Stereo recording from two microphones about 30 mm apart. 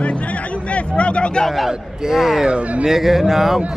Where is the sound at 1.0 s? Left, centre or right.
Left.